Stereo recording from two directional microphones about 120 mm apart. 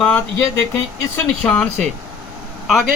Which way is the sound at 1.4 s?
5° left (ahead or behind).